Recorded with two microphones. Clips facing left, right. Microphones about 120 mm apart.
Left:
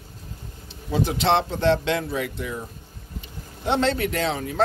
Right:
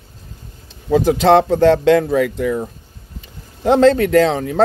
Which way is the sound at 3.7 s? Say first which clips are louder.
Right 11 dB; 40° right (ahead or behind).